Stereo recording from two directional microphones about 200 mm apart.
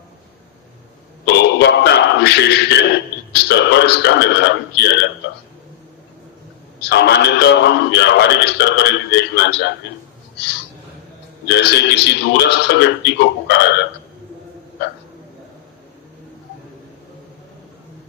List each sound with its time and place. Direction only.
1.2 s a sound: 60° left (ahead or behind)
3.3 s a man's voice: 55° left (ahead or behind)
6.8 s a man's voice: 60° left (ahead or behind)
11.4 s a man's voice: 55° left (ahead or behind)